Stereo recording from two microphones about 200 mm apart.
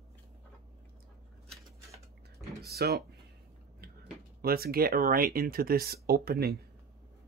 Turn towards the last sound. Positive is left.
turn(degrees=-50)  # may be behind; listen again after turning